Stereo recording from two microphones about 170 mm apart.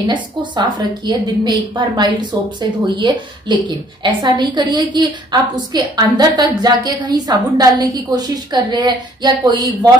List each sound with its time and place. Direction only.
0.1 s a woman's voice: 25° right (ahead or behind)